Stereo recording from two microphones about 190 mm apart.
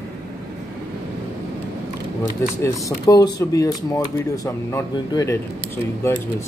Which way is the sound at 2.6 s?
20° left (ahead or behind).